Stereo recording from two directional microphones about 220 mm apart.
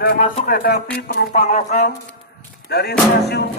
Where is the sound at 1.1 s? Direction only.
45° left (ahead or behind).